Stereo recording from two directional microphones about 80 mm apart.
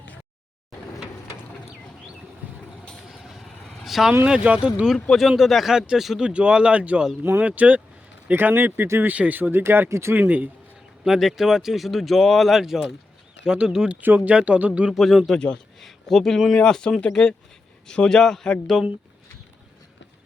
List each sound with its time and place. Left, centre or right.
2.4 s vehicle: right
3.1 s vehicle: centre
4.3 s speech: centre
4.9 s speech: centre; by 10.2 s right
10.2 s speech: right
11.0 s speech: centre
14.9 s a man's voice: centre